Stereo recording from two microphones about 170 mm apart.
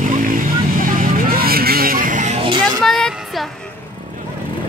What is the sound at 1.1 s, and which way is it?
Vehicle, 60° right (ahead or behind).